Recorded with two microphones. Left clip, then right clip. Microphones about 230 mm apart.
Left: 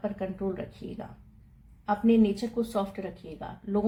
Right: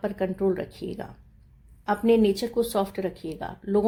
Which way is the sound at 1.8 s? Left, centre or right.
Right.